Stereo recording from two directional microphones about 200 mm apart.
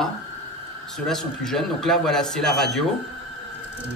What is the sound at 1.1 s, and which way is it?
Speech, centre (ahead or behind).